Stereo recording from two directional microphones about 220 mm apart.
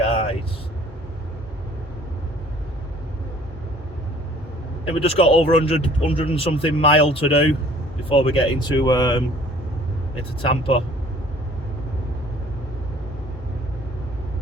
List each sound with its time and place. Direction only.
4.9 s speech: 25° left (ahead or behind)
10.5 s speech: 25° left (ahead or behind)